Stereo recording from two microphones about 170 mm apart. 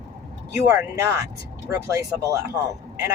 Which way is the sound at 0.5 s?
15° right (ahead or behind).